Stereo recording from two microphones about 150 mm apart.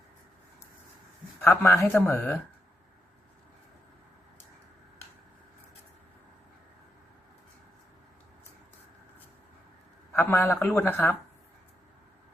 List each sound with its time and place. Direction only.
1.4 s speech: 15° left (ahead or behind)
10.1 s a man's voice: 15° left (ahead or behind)